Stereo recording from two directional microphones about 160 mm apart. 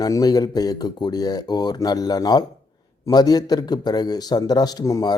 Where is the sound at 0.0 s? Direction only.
25° left (ahead or behind).